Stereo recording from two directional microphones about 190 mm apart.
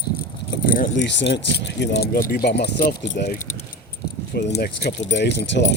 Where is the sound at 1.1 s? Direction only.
65° left (ahead or behind).